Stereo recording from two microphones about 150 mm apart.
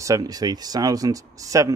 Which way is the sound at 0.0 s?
20° right (ahead or behind).